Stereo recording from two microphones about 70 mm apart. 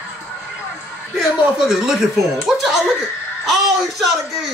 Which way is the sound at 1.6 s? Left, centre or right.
Centre.